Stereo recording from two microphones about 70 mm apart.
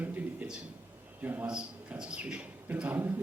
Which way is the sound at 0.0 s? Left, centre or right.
Right.